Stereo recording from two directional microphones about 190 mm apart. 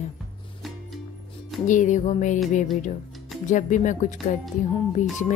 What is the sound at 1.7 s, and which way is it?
Speech, 40° left (ahead or behind).